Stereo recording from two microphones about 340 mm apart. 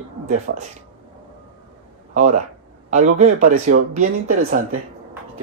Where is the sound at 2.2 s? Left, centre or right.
Right.